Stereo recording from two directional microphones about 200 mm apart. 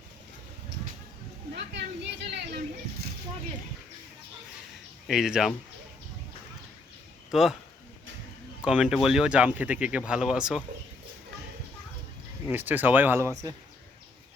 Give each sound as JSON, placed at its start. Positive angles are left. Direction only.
{"t": 1.5, "sound": "speech", "side_deg": -60}
{"t": 5.0, "sound": "speech", "side_deg": 0}
{"t": 7.3, "sound": "speech", "side_deg": 0}
{"t": 8.6, "sound": "speech", "side_deg": -5}
{"t": 12.5, "sound": "speech", "side_deg": -10}